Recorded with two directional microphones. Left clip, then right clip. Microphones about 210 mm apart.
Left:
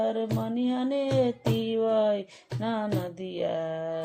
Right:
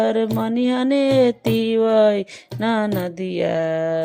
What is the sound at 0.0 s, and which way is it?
Music, 35° right (ahead or behind).